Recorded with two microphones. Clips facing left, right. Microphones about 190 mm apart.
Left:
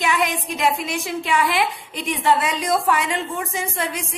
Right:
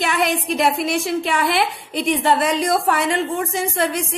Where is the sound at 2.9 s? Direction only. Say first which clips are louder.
Right 3 dB; 55° right (ahead or behind).